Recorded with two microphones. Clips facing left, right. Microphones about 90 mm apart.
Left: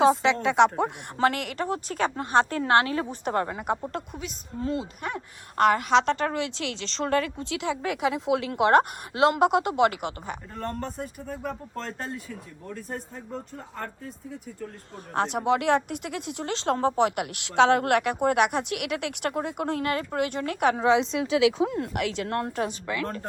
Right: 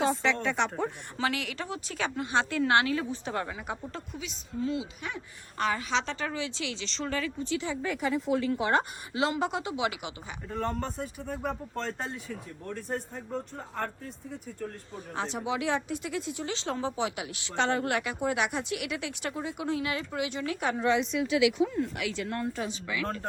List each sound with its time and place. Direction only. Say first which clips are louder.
0.0 s speech: left 7 dB; 90° left
1.2 s a woman's voice: left 7 dB; 45° left (ahead or behind)
3.1 s speech: left 6 dB; 55° left (ahead or behind)
5.5 s speech: left 9 dB; 65° left (ahead or behind); by 10.3 s 50° left (ahead or behind)
10.5 s speech: right 3 dB; centre (ahead or behind)
14.9 s speech: left 8 dB; 65° left (ahead or behind); by 21.2 s 90° left
21.8 s speech: left 3 dB; 60° left (ahead or behind)